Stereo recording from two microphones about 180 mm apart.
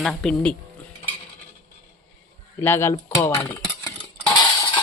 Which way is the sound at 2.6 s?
15° left (ahead or behind).